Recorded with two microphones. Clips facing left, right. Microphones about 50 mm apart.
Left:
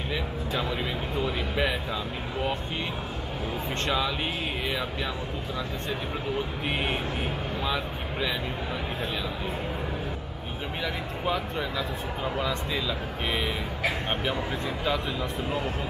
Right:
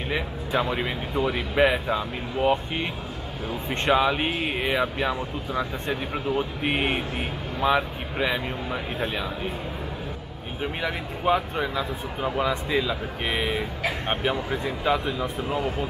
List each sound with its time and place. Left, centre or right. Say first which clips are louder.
0.1 s speech: right 5 dB; right
3.8 s speech: right 8 dB; right
10.8 s speech: even; right